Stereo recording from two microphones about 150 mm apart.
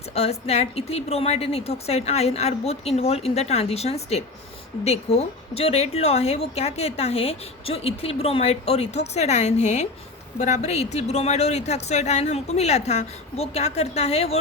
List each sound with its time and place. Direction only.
0.1 s a woman's voice: 45° left (ahead or behind)